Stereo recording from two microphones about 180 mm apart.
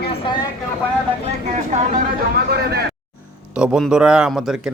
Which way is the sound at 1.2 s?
40° right (ahead or behind).